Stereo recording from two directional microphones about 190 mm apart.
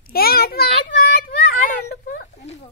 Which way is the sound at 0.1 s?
50° left (ahead or behind).